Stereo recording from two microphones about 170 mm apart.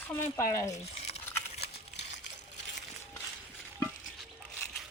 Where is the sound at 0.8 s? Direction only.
40° left (ahead or behind).